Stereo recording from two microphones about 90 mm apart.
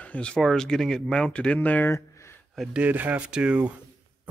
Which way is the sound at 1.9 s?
30° left (ahead or behind).